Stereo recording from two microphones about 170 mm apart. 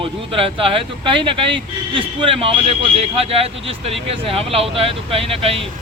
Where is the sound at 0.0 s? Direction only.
30° right (ahead or behind).